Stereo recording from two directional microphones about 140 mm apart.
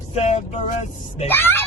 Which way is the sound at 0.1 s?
55° left (ahead or behind).